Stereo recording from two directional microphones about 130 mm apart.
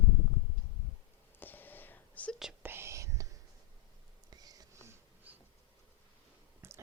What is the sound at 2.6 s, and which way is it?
Whispering, 20° right (ahead or behind).